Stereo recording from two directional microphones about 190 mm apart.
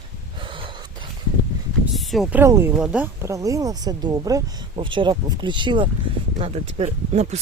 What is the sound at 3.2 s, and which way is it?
Speech, 15° right (ahead or behind).